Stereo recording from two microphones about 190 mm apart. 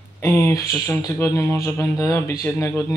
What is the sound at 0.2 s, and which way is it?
Speech, 15° left (ahead or behind).